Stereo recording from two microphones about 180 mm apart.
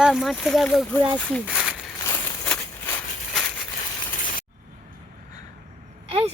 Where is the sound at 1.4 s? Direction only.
5° right (ahead or behind).